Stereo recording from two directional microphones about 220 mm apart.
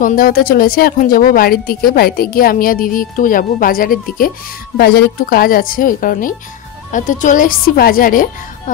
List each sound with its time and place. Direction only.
0.0 s speech: 40° left (ahead or behind)